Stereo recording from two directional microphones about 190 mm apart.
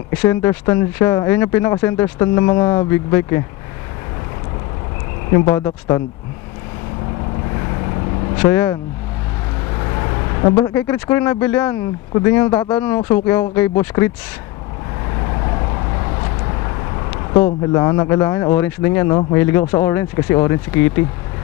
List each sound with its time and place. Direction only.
0.1 s speech: 10° left (ahead or behind)
5.3 s speech: 15° left (ahead or behind)
7.5 s vehicle: 25° left (ahead or behind)
8.5 s speech: 10° left (ahead or behind)
9.8 s vehicle: 20° left (ahead or behind)
10.5 s speech: 10° left (ahead or behind)
15.1 s vehicle: 25° left (ahead or behind)
17.7 s speech: 15° left (ahead or behind)